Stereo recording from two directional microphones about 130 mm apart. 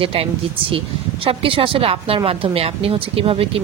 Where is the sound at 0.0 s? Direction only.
45° right (ahead or behind).